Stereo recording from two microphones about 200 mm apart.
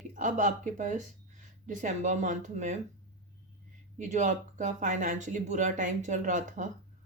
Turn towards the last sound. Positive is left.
turn(degrees=-40)  # may be behind; listen again after turning